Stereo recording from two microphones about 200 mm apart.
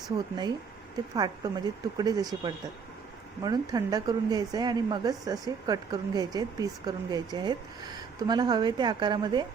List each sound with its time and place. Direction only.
1.1 s a woman's voice: 20° right (ahead or behind)